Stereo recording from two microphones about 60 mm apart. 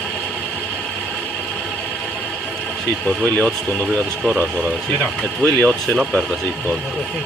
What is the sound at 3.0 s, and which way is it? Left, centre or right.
Speech, left.